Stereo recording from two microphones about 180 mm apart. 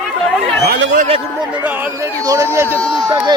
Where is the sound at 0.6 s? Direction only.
60° right (ahead or behind).